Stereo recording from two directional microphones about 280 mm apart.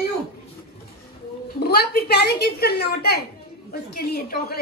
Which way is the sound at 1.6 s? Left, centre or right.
Left.